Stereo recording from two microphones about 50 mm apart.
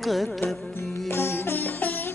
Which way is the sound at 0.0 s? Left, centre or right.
Centre.